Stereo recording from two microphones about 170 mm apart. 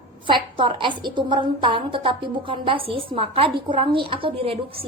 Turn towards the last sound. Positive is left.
turn(degrees=-35)  # may be behind; listen again after turning